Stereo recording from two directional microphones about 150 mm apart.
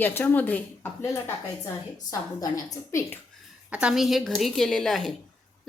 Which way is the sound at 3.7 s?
5° right (ahead or behind).